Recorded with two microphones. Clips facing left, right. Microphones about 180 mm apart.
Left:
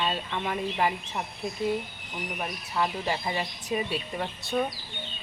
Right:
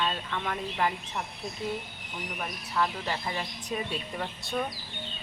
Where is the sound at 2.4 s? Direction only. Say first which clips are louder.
Left 1 dB; 15° left (ahead or behind).